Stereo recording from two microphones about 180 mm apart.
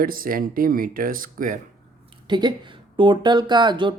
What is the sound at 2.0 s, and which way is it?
Speech, 25° right (ahead or behind).